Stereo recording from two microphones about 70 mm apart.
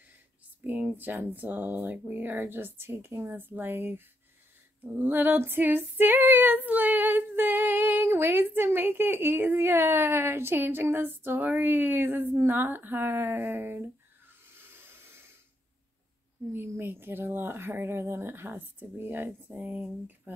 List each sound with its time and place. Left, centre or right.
0.7 s female singing: right
14.4 s snort: right
16.5 s speech: right
20.3 s female singing: right